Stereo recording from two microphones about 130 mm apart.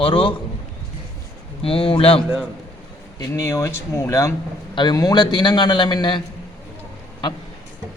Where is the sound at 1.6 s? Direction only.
45° left (ahead or behind).